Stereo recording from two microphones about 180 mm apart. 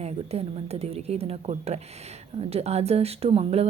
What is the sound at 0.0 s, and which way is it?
Speech, 35° right (ahead or behind).